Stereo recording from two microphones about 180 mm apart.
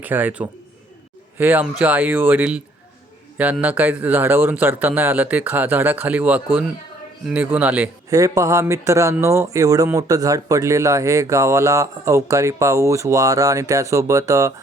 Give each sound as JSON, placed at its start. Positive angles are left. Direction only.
{"t": 0.0, "sound": "a man's voice", "side_deg": -10}